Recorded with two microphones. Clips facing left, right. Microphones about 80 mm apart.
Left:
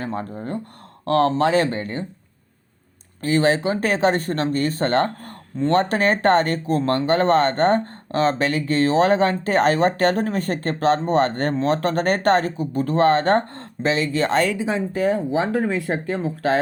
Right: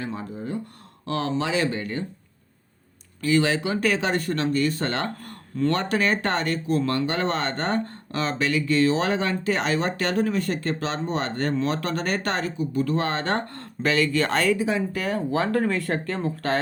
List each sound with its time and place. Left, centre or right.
0.0 s speech: left
3.2 s speech: left; by 16.6 s centre